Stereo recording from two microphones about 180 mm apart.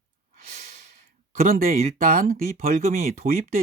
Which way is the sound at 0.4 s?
50° right (ahead or behind).